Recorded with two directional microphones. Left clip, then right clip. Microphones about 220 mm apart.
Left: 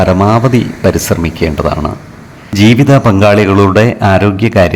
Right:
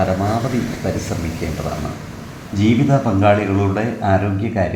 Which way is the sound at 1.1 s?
45° left (ahead or behind).